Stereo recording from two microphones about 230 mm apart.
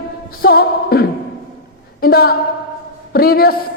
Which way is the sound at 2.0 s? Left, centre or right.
Left.